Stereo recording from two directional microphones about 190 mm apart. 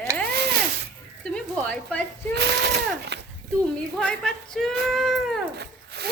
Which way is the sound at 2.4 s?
60° right (ahead or behind).